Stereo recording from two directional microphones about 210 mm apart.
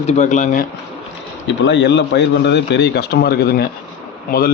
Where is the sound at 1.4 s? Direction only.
55° left (ahead or behind).